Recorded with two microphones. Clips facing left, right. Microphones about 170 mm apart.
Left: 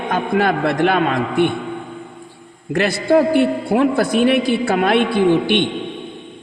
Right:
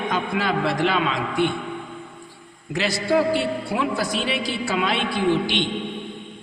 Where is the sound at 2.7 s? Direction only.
55° left (ahead or behind).